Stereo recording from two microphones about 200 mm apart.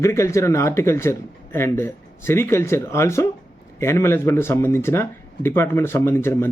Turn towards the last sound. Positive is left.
turn(degrees=10)  # may be behind; listen again after turning